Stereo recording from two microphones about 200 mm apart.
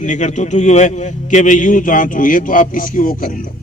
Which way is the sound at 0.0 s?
40° left (ahead or behind).